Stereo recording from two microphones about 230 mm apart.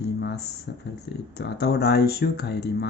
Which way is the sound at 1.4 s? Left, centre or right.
Left.